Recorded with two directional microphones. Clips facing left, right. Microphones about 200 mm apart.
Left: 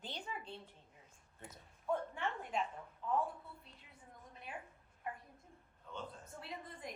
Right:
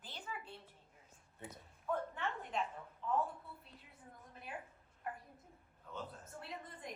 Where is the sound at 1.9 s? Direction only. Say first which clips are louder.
Left 1 dB; 10° left (ahead or behind).